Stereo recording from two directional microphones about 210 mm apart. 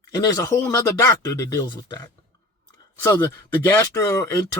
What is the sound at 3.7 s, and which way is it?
Speech, 15° left (ahead or behind).